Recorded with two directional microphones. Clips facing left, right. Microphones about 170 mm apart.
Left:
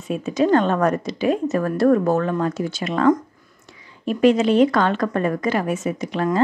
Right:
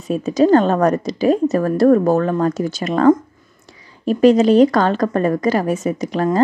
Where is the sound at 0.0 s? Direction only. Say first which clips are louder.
Right 5 dB; 40° right (ahead or behind).